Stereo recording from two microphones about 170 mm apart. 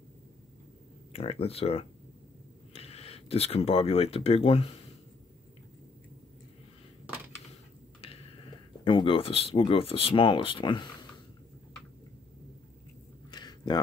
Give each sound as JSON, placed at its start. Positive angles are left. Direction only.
{"t": 1.1, "sound": "speech", "side_deg": 35}
{"t": 8.8, "sound": "speech", "side_deg": 30}
{"t": 13.3, "sound": "a sound", "side_deg": 25}